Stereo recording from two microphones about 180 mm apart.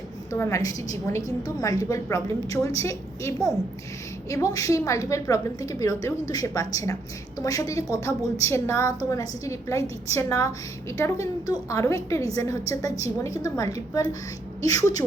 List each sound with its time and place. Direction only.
0.3 s a woman's voice: 15° left (ahead or behind)